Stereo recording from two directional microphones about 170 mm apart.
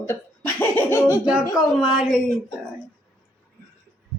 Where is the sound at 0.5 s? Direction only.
15° left (ahead or behind).